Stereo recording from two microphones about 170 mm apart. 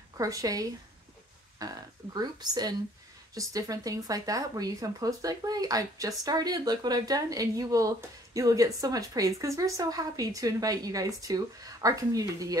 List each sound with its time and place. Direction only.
0.2 s speech: 20° right (ahead or behind)